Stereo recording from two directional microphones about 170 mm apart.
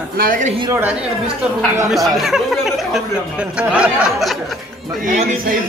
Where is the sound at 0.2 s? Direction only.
55° right (ahead or behind).